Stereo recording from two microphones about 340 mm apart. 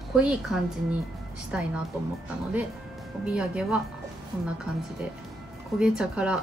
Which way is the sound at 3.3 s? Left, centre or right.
Centre.